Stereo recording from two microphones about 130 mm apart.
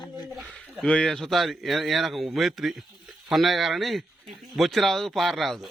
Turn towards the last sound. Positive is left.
turn(degrees=0)  # may be behind; listen again after turning